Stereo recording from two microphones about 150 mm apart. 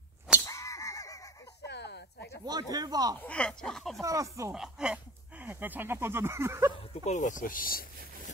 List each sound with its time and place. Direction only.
0.5 s a sound: 20° left (ahead or behind)
1.8 s a sound: 90° left
2.4 s speech: 25° right (ahead or behind)
3.2 s speech: 10° left (ahead or behind)
4.0 s speech: 20° right (ahead or behind)
4.6 s speech: 5° right (ahead or behind)
6.8 s speech: 45° left (ahead or behind); by 7.8 s 70° left (ahead or behind)